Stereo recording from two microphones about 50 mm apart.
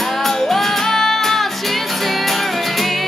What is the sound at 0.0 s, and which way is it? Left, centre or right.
Music, centre.